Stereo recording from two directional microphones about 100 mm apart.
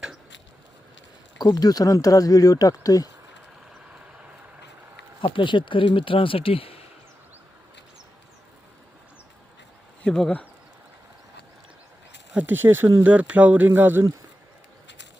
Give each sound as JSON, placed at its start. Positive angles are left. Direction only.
{"t": 1.4, "sound": "speech", "side_deg": 40}
{"t": 5.2, "sound": "speech", "side_deg": 55}
{"t": 10.0, "sound": "speech", "side_deg": 10}
{"t": 12.3, "sound": "speech", "side_deg": -15}